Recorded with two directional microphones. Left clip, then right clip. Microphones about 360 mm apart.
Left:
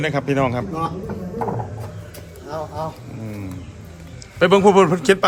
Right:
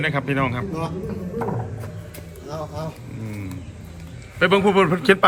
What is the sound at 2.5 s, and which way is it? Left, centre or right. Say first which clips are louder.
Vehicle: left 3 dB; centre.